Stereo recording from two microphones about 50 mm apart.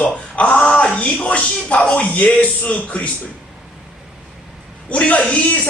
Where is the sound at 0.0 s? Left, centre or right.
Left.